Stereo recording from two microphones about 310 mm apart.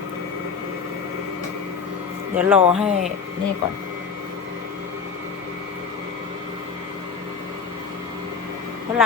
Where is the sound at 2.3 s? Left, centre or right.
Centre.